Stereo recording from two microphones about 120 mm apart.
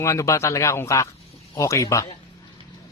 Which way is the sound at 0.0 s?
25° left (ahead or behind).